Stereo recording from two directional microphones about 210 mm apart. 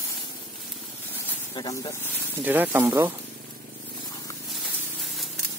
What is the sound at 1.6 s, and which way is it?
Speech, 20° left (ahead or behind).